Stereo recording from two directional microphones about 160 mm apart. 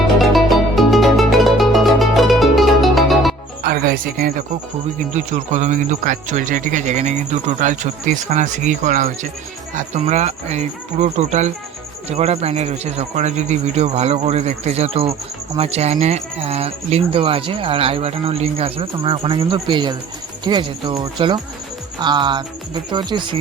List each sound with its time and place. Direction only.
0.3 s music: centre (ahead or behind)
3.6 s music: 70° right (ahead or behind)
5.1 s speech: 50° right (ahead or behind); by 23.4 s 30° right (ahead or behind)